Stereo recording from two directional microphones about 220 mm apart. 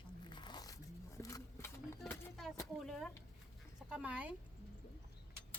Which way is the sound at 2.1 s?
Centre (ahead or behind).